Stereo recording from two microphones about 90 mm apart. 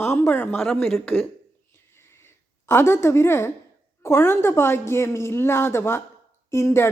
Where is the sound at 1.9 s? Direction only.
30° left (ahead or behind).